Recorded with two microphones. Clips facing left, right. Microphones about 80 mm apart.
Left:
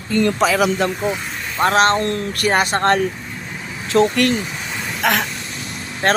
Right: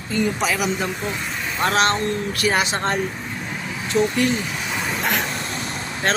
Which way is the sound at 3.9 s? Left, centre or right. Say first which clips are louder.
Left 4 dB; left.